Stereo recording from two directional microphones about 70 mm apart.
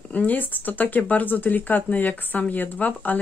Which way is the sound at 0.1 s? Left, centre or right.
Left.